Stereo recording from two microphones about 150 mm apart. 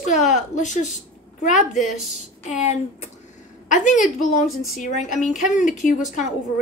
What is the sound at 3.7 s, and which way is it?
A woman's voice, 55° left (ahead or behind).